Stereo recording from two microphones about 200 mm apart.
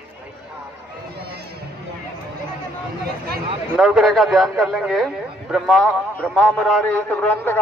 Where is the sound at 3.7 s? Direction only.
Centre (ahead or behind).